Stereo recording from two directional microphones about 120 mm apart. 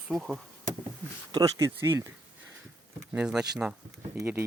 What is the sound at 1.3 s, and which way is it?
Speech, 30° right (ahead or behind).